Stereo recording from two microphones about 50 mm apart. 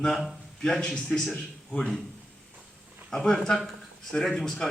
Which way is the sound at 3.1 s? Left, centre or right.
Centre.